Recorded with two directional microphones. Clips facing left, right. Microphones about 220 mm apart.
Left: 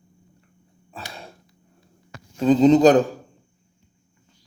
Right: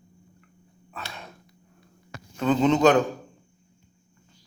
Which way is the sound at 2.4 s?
35° left (ahead or behind).